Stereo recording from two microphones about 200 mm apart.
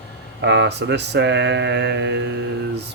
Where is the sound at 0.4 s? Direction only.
60° right (ahead or behind).